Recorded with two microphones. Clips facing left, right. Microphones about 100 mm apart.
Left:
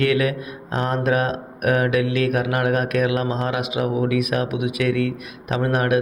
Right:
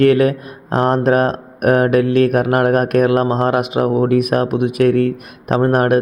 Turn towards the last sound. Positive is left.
turn(degrees=-45)  # may be behind; listen again after turning